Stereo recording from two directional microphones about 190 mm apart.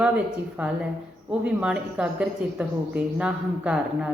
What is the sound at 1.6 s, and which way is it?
A woman's voice, 5° right (ahead or behind).